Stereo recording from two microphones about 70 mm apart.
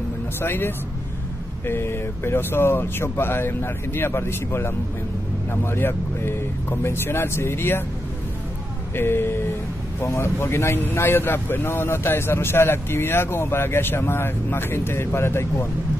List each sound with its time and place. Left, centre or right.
0.4 s a man's voice: left
8.9 s a man's voice: left
9.9 s a man's voice: left